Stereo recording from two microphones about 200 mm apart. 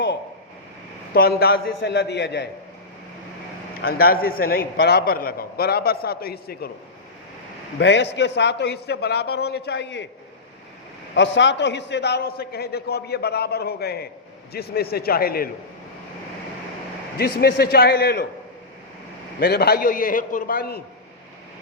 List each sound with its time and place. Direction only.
1.1 s a man's voice: 50° left (ahead or behind)
3.8 s a man's voice: 50° left (ahead or behind)
7.8 s a man's voice: 60° left (ahead or behind)
11.1 s a man's voice: 65° left (ahead or behind)
17.2 s a man's voice: 50° left (ahead or behind)
19.4 s a man's voice: 50° left (ahead or behind)